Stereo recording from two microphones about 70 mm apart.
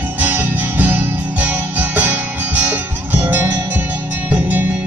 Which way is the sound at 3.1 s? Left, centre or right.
Right.